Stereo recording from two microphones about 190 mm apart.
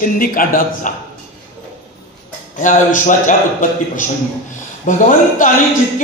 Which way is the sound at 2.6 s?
40° left (ahead or behind).